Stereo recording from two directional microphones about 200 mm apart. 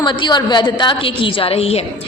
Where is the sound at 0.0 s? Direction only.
20° left (ahead or behind).